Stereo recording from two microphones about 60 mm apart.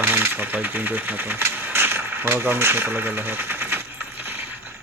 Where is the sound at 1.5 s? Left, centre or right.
Right.